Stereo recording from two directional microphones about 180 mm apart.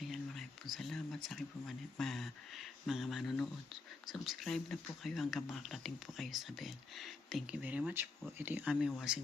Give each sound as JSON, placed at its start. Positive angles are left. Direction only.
{"t": 0.0, "sound": "speech", "side_deg": 0}